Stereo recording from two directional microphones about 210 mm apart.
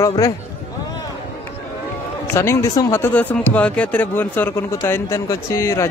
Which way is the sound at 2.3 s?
15° left (ahead or behind).